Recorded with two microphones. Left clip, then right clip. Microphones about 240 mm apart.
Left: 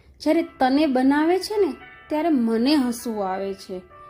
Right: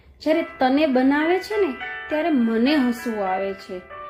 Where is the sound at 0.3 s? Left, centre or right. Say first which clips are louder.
Even; left.